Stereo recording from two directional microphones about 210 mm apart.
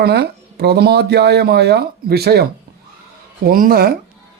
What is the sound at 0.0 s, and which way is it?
Speech, 50° right (ahead or behind).